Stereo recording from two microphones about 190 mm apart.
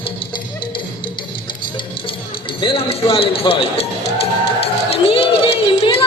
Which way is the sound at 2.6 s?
30° left (ahead or behind).